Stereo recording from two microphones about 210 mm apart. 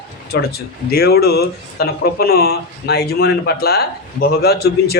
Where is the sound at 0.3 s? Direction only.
50° left (ahead or behind).